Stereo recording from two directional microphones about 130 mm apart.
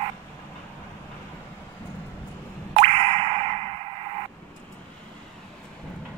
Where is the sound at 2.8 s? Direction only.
50° right (ahead or behind).